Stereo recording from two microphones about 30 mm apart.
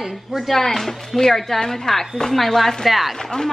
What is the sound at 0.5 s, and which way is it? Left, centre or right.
Speech, centre.